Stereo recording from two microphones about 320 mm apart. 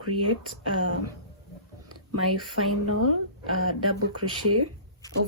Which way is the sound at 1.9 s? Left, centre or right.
Right.